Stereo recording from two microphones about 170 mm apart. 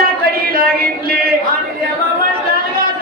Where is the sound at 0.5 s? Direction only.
60° right (ahead or behind).